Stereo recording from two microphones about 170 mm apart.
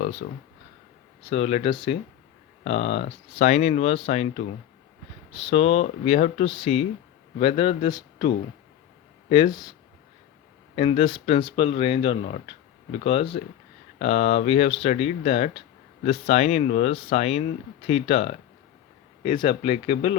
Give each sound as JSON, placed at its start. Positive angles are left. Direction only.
{"t": 0.0, "sound": "speech", "side_deg": 40}
{"t": 1.3, "sound": "speech", "side_deg": 35}
{"t": 10.8, "sound": "speech", "side_deg": 35}